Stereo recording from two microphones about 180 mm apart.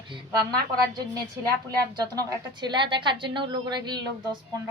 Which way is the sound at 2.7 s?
25° right (ahead or behind).